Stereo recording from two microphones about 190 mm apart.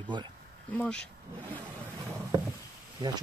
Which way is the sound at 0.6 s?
10° left (ahead or behind).